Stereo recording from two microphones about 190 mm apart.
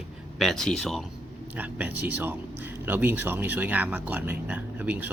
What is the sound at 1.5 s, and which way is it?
A man's voice, 10° right (ahead or behind).